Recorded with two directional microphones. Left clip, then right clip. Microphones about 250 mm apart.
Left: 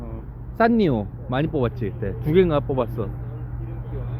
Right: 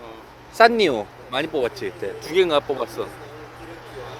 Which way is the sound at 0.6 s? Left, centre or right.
Centre.